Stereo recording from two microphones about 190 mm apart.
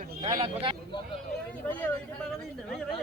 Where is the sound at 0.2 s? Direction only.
15° right (ahead or behind).